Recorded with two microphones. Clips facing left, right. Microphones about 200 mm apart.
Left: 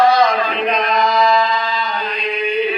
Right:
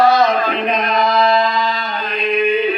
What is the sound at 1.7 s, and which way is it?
Mantra, 50° right (ahead or behind).